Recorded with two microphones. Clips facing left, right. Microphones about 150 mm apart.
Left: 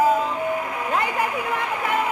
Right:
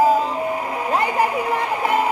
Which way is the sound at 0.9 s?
35° right (ahead or behind).